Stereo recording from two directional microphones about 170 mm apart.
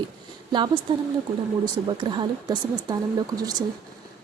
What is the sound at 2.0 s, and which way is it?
Speech, 25° right (ahead or behind).